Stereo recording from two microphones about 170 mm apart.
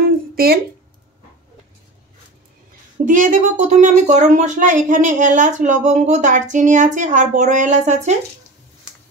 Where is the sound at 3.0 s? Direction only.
50° right (ahead or behind).